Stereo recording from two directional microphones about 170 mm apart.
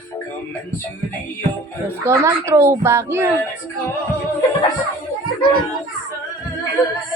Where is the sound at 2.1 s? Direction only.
15° right (ahead or behind).